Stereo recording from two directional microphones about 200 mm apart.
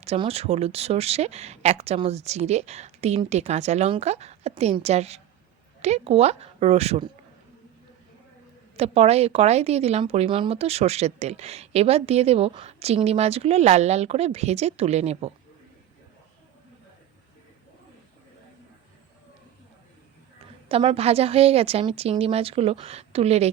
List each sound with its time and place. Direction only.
0.0 s a woman's voice: 30° right (ahead or behind)
8.7 s a woman's voice: 30° right (ahead or behind)
20.7 s a woman's voice: 30° right (ahead or behind)